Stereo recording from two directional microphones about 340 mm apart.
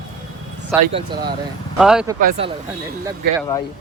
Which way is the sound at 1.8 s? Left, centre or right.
Centre.